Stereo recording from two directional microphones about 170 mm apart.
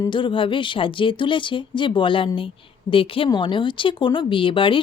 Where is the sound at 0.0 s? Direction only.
30° left (ahead or behind).